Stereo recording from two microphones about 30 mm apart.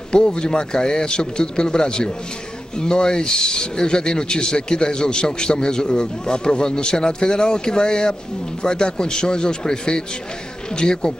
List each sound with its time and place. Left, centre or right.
0.1 s speech: left